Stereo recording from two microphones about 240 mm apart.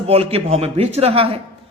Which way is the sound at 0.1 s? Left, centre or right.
Right.